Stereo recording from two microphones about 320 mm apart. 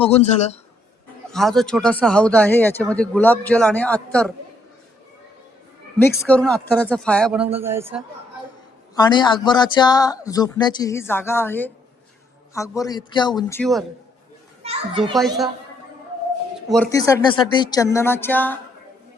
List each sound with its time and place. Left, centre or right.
0.0 s a man's voice: centre
1.3 s speech: centre
6.0 s a man's voice: centre
9.0 s speech: centre
14.6 s a child's voice: centre
15.1 s speech: centre
16.6 s speech: centre